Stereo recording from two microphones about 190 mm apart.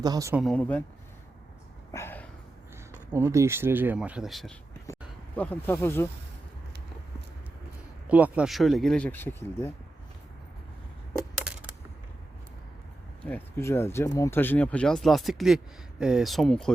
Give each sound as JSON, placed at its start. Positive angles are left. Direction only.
{"t": 0.0, "sound": "speech", "side_deg": -20}
{"t": 0.3, "sound": "speech", "side_deg": 5}
{"t": 1.9, "sound": "a sound", "side_deg": 15}
{"t": 3.1, "sound": "speech", "side_deg": -10}
{"t": 8.0, "sound": "speech", "side_deg": -5}
{"t": 13.2, "sound": "speech", "side_deg": 10}